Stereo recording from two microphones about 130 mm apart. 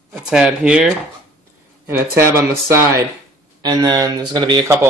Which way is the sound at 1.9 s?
20° right (ahead or behind).